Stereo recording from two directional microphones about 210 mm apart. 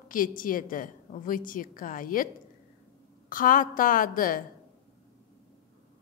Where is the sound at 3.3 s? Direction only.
40° left (ahead or behind).